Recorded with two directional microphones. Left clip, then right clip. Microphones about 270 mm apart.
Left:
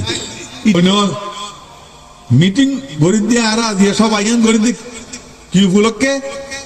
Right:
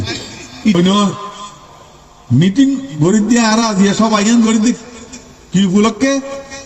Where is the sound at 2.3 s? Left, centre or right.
Left.